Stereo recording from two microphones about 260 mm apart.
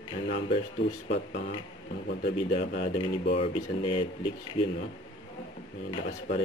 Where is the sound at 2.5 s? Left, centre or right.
Left.